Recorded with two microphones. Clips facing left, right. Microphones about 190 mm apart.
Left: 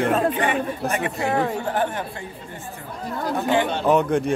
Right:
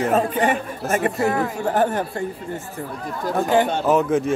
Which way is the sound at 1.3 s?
30° left (ahead or behind).